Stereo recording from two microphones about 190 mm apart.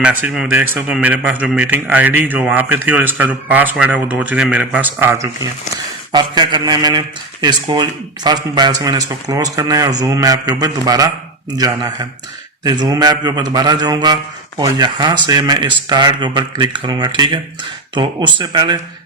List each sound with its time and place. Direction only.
0.0 s a man's voice: 5° right (ahead or behind); by 18.8 s 20° right (ahead or behind)